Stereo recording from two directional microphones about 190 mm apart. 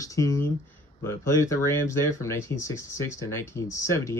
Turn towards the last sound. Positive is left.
turn(degrees=15)  # may be behind; listen again after turning